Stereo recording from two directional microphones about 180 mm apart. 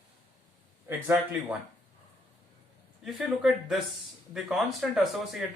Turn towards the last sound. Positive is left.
turn(degrees=0)  # may be behind; listen again after turning